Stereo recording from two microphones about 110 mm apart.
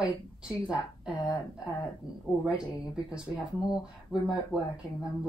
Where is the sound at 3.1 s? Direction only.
5° right (ahead or behind).